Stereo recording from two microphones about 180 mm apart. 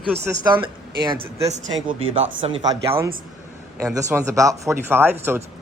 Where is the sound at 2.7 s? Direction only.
15° right (ahead or behind).